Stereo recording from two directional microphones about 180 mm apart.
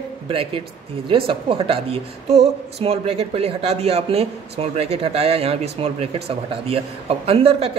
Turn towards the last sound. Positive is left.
turn(degrees=-35)  # may be behind; listen again after turning